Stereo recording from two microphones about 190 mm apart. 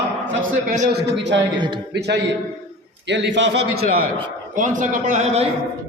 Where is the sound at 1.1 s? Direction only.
70° right (ahead or behind).